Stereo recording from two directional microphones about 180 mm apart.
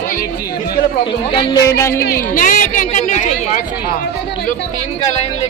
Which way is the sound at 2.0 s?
55° left (ahead or behind).